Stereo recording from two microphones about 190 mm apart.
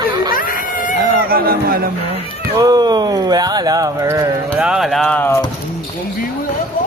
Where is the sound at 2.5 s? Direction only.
20° right (ahead or behind).